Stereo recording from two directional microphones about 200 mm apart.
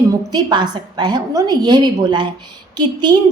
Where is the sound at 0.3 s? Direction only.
20° right (ahead or behind).